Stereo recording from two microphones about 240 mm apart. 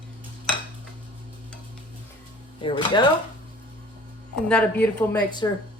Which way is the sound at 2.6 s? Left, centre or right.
Left.